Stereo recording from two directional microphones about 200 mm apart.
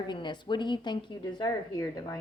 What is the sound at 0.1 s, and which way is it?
A woman's voice, 20° left (ahead or behind).